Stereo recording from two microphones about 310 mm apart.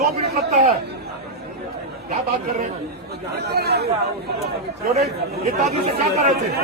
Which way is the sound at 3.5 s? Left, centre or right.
Right.